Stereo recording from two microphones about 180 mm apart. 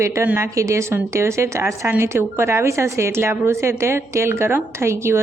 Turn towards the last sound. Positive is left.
turn(degrees=-15)  # may be behind; listen again after turning